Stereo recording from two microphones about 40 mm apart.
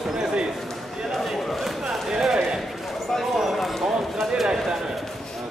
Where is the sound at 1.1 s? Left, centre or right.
Centre.